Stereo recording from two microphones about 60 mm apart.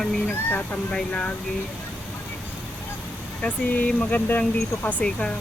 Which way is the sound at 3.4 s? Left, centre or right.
Left.